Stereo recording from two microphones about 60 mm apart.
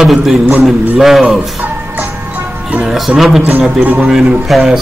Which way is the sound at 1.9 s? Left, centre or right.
Right.